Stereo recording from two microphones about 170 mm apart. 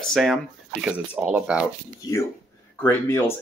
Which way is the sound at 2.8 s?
10° left (ahead or behind).